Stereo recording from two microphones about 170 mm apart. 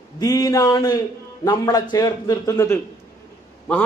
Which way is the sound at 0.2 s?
20° left (ahead or behind).